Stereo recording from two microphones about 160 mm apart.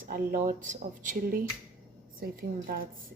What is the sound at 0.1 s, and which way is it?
Speech, 55° right (ahead or behind).